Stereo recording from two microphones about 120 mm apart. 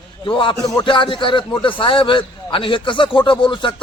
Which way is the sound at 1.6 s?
45° left (ahead or behind).